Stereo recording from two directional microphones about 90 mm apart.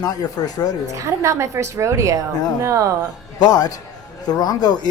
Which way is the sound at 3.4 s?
45° left (ahead or behind).